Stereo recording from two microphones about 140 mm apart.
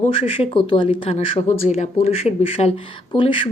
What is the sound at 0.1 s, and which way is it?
Speech, 45° left (ahead or behind).